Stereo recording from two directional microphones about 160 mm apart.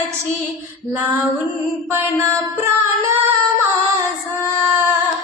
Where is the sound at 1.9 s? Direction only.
15° right (ahead or behind).